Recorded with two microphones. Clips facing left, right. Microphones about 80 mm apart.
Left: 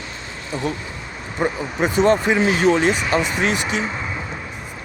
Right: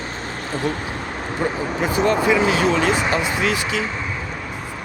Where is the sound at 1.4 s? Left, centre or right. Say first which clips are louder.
Left 2 dB; left.